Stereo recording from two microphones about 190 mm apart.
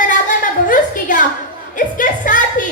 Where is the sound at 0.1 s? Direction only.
45° left (ahead or behind).